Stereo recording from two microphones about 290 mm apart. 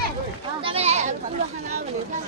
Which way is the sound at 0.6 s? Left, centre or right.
Centre.